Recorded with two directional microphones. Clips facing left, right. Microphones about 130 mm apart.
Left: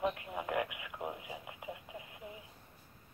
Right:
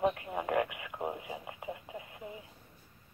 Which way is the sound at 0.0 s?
35° right (ahead or behind).